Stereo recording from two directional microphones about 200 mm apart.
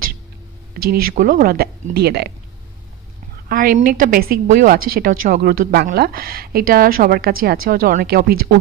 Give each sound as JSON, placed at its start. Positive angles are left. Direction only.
{"t": 0.8, "sound": "a woman's voice", "side_deg": -40}
{"t": 3.4, "sound": "a woman's voice", "side_deg": -45}